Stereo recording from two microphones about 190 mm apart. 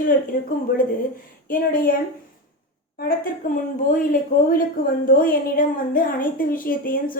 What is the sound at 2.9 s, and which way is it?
Speech, 50° left (ahead or behind).